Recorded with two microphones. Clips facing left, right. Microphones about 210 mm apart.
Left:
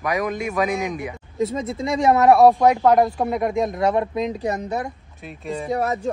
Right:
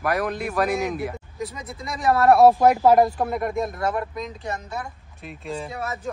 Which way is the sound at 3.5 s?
20° left (ahead or behind).